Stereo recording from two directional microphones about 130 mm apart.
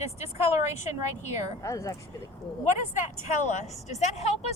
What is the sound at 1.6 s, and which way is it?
Speech, 25° left (ahead or behind).